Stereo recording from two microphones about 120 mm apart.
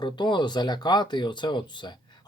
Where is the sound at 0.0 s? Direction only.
40° left (ahead or behind).